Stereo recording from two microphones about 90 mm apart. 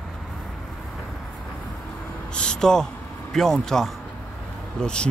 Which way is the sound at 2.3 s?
10° left (ahead or behind).